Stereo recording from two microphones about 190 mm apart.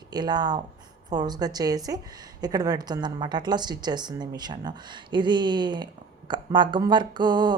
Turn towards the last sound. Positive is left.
turn(degrees=-20)  # may be behind; listen again after turning